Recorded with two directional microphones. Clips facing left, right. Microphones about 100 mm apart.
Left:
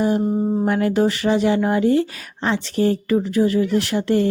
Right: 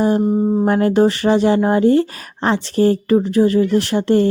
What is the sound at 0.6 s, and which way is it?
A woman's voice, 40° right (ahead or behind).